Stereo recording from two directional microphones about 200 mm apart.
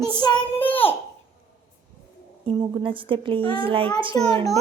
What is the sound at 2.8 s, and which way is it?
Speech, 25° right (ahead or behind).